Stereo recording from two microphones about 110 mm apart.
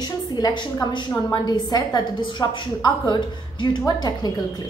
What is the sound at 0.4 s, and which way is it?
A woman's voice, 40° left (ahead or behind).